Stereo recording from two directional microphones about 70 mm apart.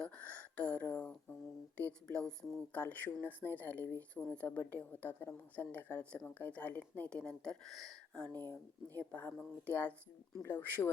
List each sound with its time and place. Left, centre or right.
0.0 s a sound: centre
1.9 s speech: centre
2.6 s a woman's voice: left
8.3 s speech: right
9.1 s a woman's voice: left